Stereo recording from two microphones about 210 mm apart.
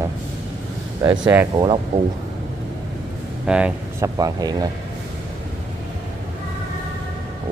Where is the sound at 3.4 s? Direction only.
5° right (ahead or behind).